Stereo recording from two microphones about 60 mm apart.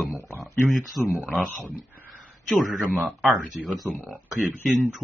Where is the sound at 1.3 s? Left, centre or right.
Centre.